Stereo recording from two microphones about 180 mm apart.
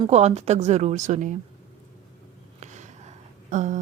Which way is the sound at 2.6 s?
40° right (ahead or behind).